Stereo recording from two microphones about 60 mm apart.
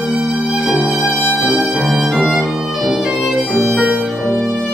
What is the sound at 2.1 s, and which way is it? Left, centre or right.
Violin, centre.